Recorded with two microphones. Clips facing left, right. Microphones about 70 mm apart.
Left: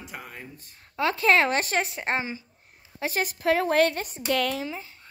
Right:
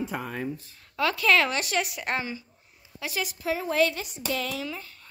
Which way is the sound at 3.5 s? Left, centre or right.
Left.